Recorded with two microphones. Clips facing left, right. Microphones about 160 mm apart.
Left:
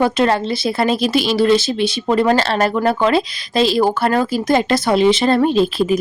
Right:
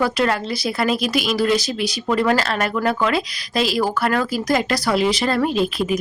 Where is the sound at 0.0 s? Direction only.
25° left (ahead or behind).